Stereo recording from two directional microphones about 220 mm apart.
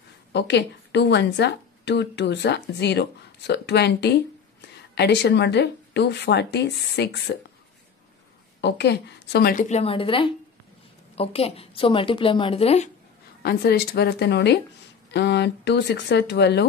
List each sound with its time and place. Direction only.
0.3 s a woman's voice: 50° left (ahead or behind)
8.5 s a woman's voice: 50° left (ahead or behind); by 12.9 s 30° left (ahead or behind)
13.4 s speech: 45° left (ahead or behind)